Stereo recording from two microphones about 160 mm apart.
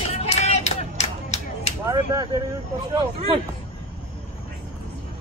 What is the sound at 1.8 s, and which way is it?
Speech, 20° right (ahead or behind).